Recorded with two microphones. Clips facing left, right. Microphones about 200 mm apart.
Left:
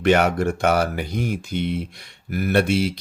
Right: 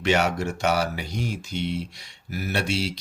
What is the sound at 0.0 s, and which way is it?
Speech, 55° left (ahead or behind).